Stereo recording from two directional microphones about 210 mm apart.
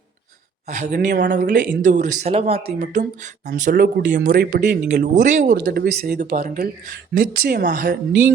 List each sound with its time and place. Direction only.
0.7 s speech: 35° right (ahead or behind)